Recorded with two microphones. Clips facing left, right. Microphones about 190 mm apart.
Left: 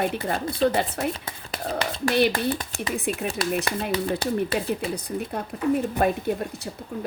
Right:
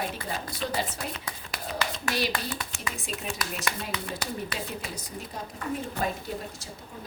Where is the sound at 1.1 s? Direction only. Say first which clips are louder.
Left 3 dB; 30° left (ahead or behind).